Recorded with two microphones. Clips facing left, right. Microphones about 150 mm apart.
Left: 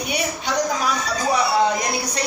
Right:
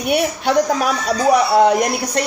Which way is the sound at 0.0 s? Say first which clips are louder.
Right 7 dB; 60° right (ahead or behind).